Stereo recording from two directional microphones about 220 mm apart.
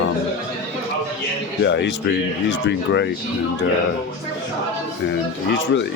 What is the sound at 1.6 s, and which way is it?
Speech, 55° left (ahead or behind).